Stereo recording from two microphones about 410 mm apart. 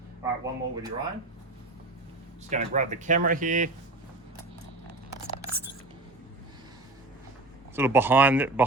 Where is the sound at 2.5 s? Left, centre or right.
Centre.